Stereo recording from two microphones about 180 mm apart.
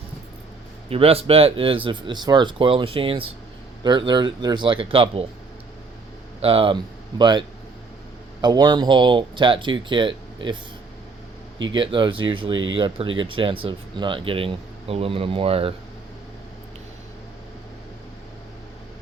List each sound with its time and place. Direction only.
0.9 s speech: 35° right (ahead or behind)
6.4 s speech: 30° right (ahead or behind)
11.7 s speech: 25° right (ahead or behind)